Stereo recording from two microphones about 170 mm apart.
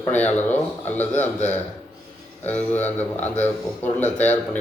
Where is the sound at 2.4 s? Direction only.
10° left (ahead or behind).